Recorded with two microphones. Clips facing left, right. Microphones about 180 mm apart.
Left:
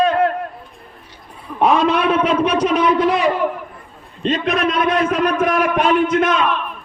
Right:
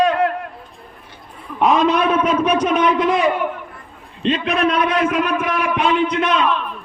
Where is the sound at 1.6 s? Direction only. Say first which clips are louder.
Even; 30° left (ahead or behind).